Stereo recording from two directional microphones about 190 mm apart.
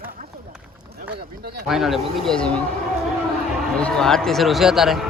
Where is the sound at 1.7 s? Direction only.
Centre (ahead or behind).